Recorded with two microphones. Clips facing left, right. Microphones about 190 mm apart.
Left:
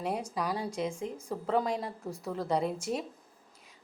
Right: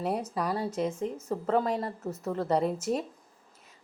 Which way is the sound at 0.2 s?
10° left (ahead or behind).